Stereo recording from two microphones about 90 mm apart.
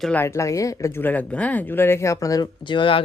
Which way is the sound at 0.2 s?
30° left (ahead or behind).